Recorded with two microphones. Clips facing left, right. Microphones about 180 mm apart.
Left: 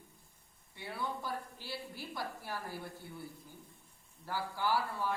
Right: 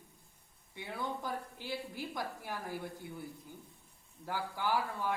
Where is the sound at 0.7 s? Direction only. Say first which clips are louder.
Right 1 dB; 15° right (ahead or behind).